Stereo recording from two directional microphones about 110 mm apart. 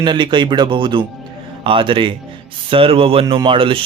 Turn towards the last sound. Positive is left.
turn(degrees=-55)  # may be behind; listen again after turning